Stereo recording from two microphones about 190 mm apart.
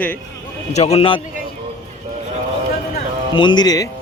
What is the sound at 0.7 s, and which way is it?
Speech, 35° left (ahead or behind).